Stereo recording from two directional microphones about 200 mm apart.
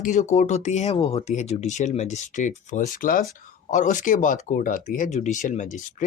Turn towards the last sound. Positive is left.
turn(degrees=40)  # may be behind; listen again after turning